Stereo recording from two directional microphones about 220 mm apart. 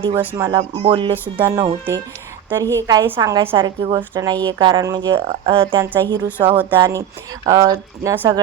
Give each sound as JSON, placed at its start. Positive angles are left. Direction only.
{"t": 0.2, "sound": "speech", "side_deg": -15}
{"t": 0.5, "sound": "a woman's voice", "side_deg": -25}
{"t": 1.1, "sound": "a woman's voice", "side_deg": -10}
{"t": 5.8, "sound": "speech", "side_deg": -10}